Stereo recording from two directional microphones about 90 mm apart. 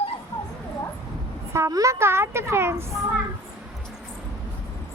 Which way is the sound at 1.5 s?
35° right (ahead or behind).